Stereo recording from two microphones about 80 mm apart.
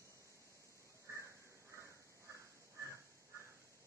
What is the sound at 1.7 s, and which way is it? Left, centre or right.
Crow, right.